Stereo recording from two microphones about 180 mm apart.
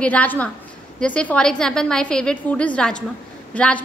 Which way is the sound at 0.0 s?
10° left (ahead or behind).